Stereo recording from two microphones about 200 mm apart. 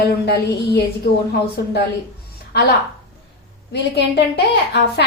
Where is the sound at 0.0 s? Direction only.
55° left (ahead or behind).